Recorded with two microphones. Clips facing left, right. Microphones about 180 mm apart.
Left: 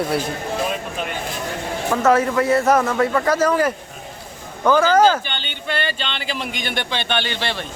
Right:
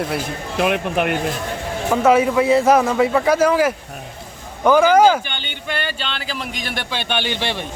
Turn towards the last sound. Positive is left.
turn(degrees=-15)  # may be behind; listen again after turning